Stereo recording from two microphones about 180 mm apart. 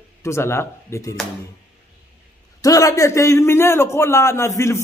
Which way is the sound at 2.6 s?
20° left (ahead or behind).